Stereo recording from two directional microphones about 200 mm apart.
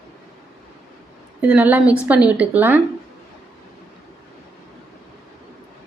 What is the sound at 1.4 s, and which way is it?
A woman's voice, 5° right (ahead or behind).